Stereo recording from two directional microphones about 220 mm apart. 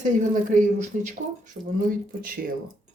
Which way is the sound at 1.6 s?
40° right (ahead or behind).